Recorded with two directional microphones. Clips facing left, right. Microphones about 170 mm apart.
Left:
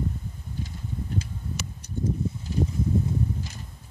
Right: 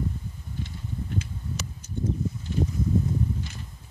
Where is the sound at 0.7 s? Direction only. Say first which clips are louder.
Left 1 dB; 35° left (ahead or behind).